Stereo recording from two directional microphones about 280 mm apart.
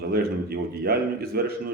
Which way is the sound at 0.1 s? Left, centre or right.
Right.